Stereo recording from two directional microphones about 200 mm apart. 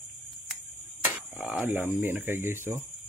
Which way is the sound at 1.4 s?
5° right (ahead or behind).